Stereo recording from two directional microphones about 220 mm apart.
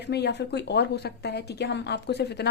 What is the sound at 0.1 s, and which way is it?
A woman's voice, 50° left (ahead or behind).